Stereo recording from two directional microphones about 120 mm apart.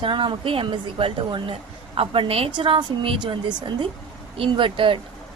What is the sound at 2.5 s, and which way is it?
A woman's voice, 40° right (ahead or behind).